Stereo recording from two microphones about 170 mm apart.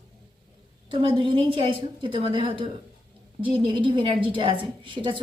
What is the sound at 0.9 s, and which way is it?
A woman's voice, 30° right (ahead or behind).